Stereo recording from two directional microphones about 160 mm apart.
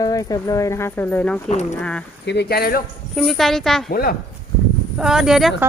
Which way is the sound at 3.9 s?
70° left (ahead or behind).